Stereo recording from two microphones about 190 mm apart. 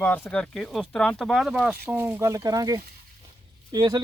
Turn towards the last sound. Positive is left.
turn(degrees=-20)  # may be behind; listen again after turning